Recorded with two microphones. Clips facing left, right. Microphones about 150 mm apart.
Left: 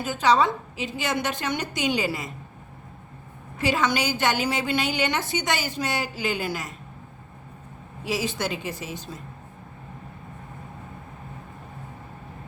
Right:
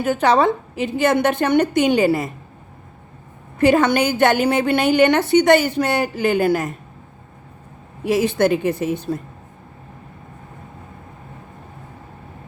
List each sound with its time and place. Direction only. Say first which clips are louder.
0.0 s a woman's voice: right 5 dB; 55° right (ahead or behind)
3.6 s a woman's voice: right 9 dB; 55° right (ahead or behind)
8.0 s a woman's voice: right 11 dB; 55° right (ahead or behind)